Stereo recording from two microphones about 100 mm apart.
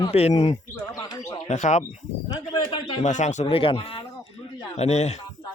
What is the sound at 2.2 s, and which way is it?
Speech, 45° left (ahead or behind).